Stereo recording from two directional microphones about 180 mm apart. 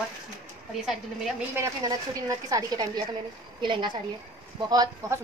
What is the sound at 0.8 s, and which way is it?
Speech, 5° right (ahead or behind).